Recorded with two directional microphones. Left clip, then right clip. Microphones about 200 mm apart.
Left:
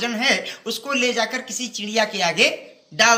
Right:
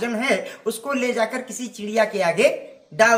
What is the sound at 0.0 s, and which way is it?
A man's voice, 20° right (ahead or behind).